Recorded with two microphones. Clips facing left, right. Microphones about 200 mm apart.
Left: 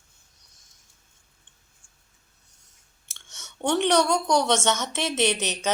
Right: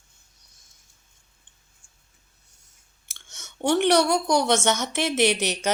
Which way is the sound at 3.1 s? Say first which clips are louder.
Right 1 dB; 10° right (ahead or behind).